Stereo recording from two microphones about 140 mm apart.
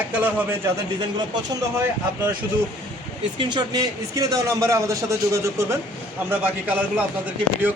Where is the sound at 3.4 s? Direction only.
30° right (ahead or behind).